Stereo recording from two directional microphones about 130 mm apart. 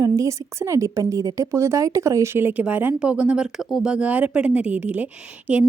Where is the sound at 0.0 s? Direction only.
25° right (ahead or behind).